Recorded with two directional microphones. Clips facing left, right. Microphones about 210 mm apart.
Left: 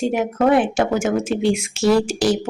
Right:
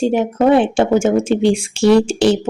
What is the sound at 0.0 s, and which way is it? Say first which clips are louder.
Speech: right 4 dB; 30° right (ahead or behind).